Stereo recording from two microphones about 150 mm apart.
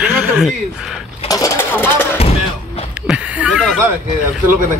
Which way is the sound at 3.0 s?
5° right (ahead or behind).